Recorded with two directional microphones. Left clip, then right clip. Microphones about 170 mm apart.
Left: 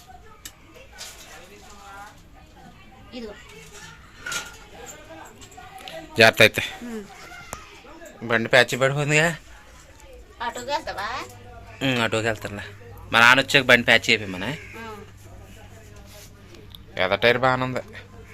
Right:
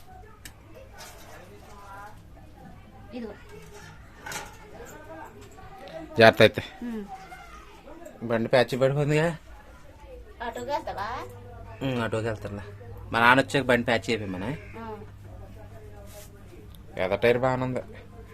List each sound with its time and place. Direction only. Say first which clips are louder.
5.8 s a sound: left 1 dB; 5° right (ahead or behind)
8.2 s a man's voice: left 5 dB; centre (ahead or behind)
10.7 s a woman's voice: left 2 dB; 15° right (ahead or behind)
11.8 s a man's voice: left 6 dB; 5° left (ahead or behind)
16.9 s a man's voice: left 4 dB; 5° right (ahead or behind)